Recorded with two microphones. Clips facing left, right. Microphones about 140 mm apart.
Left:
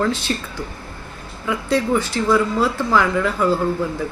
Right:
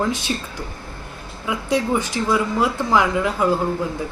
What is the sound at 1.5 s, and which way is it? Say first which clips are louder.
Speech: left 1 dB; 15° right (ahead or behind).